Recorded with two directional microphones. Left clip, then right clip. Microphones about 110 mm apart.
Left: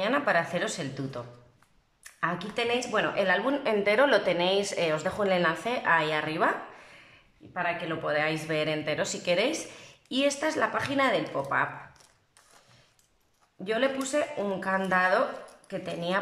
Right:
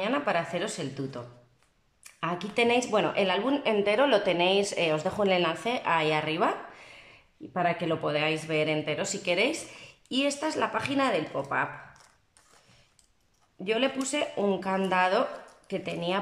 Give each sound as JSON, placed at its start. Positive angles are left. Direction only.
{"t": 0.0, "sound": "a woman's voice", "side_deg": -10}
{"t": 2.1, "sound": "a woman's voice", "side_deg": -20}
{"t": 3.3, "sound": "a woman's voice", "side_deg": -15}
{"t": 8.2, "sound": "a woman's voice", "side_deg": -15}
{"t": 13.7, "sound": "a woman's voice", "side_deg": -15}